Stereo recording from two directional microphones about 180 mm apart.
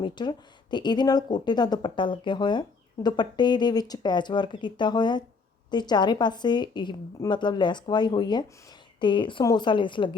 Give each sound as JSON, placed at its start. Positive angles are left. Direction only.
{"t": 0.0, "sound": "speech", "side_deg": 25}